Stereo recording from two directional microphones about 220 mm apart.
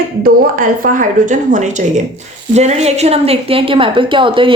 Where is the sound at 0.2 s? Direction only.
40° right (ahead or behind).